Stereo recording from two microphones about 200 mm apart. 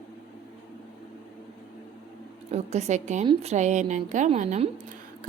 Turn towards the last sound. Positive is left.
turn(degrees=-35)  # may be behind; listen again after turning